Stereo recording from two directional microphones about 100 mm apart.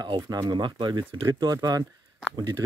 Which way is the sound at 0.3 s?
45° right (ahead or behind).